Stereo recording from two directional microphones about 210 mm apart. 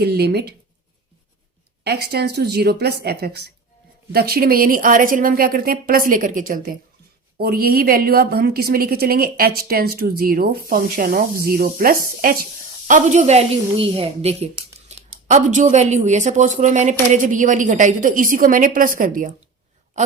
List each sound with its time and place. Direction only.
0.0 s a woman's voice: 50° right (ahead or behind)
1.8 s a woman's voice: 50° right (ahead or behind)